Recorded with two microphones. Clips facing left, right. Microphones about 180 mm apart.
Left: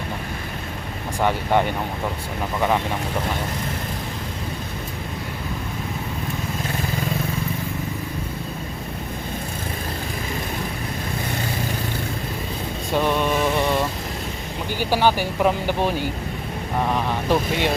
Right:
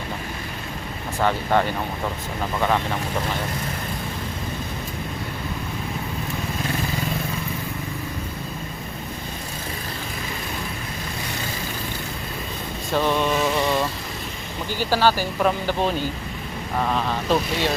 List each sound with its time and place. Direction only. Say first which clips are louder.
1.2 s speech: left 1 dB; 15° left (ahead or behind)
12.9 s vehicle: even; 10° left (ahead or behind)
14.7 s speech: even; 15° left (ahead or behind)